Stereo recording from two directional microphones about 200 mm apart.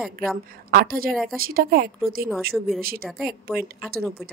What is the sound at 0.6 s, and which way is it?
Speech, 45° right (ahead or behind).